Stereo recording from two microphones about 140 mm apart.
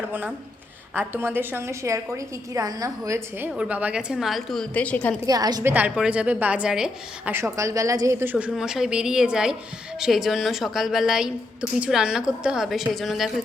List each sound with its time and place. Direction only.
0.1 s a woman's voice: 10° right (ahead or behind); by 5.1 s 10° left (ahead or behind)
5.2 s a woman's voice: 25° right (ahead or behind)
5.6 s a woman's voice: 10° right (ahead or behind)
7.3 s a woman's voice: 20° right (ahead or behind); by 13.3 s centre (ahead or behind)